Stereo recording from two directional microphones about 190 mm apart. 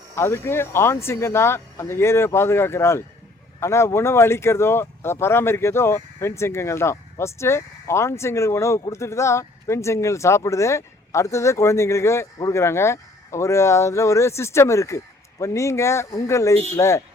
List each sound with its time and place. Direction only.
0.2 s speech: 15° left (ahead or behind)